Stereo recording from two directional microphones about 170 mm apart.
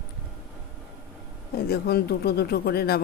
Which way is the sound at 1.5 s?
65° left (ahead or behind).